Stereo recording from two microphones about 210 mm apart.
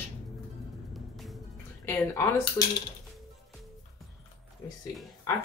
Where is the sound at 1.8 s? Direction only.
15° left (ahead or behind).